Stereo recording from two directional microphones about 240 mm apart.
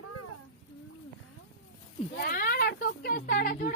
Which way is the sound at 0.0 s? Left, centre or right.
Left.